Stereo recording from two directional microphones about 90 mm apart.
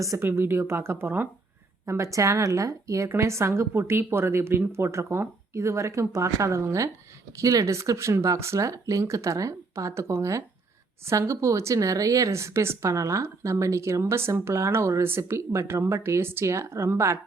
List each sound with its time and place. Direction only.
0.2 s speech: 25° right (ahead or behind)
1.9 s speech: 35° right (ahead or behind)